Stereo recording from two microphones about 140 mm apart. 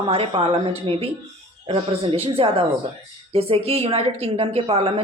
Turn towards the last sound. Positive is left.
turn(degrees=-40)  # may be behind; listen again after turning